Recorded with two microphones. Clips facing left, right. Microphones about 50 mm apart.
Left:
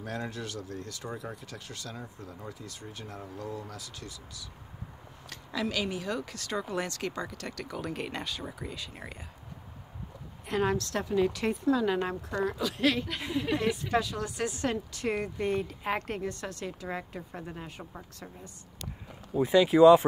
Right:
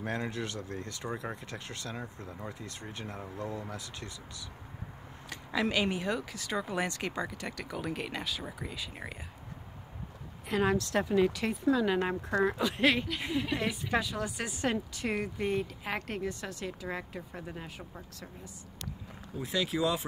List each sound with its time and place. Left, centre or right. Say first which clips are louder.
0.0 s speech: right 2 dB; right
5.3 s speech: right 2 dB; centre
6.1 s speech: even; centre
10.4 s a woman's voice: even; centre
10.9 s a woman's voice: right 1 dB; centre
12.0 s speech: right 2 dB; right
13.6 s a woman's voice: left 3 dB; centre
19.3 s speech: left 10 dB; left